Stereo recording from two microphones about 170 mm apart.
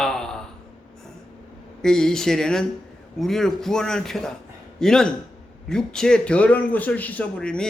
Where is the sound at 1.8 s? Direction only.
5° left (ahead or behind).